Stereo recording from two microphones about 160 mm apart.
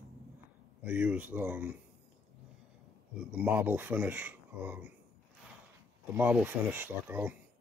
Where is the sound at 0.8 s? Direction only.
10° right (ahead or behind).